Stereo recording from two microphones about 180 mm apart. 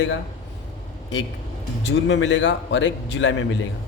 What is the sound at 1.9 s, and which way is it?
A man's voice, 85° left.